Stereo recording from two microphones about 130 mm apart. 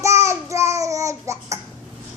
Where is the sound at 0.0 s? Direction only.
20° right (ahead or behind).